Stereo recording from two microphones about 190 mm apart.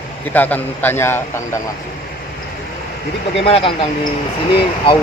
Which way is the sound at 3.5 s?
30° left (ahead or behind).